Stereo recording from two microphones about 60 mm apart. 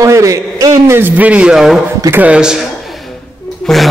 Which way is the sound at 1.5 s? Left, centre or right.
Centre.